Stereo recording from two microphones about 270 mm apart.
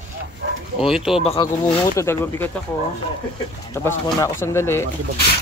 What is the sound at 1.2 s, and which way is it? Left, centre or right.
Speech, left.